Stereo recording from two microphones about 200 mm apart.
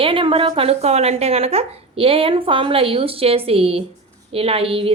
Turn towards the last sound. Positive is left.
turn(degrees=-30)  # may be behind; listen again after turning